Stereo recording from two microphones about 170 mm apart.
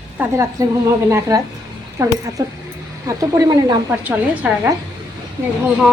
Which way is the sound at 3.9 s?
10° right (ahead or behind).